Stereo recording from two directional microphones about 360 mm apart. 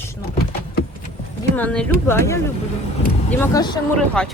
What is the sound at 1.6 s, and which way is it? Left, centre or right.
Speech, centre.